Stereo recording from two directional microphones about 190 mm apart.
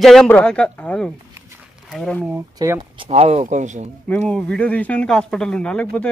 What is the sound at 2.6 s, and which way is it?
Speech, 20° right (ahead or behind).